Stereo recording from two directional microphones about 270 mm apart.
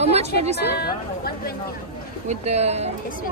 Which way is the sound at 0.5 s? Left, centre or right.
Left.